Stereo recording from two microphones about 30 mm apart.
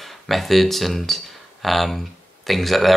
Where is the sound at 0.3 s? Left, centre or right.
Centre.